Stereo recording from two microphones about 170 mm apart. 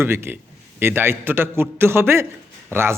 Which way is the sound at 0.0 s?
15° right (ahead or behind).